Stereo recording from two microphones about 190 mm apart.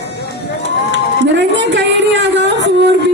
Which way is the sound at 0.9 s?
70° right (ahead or behind).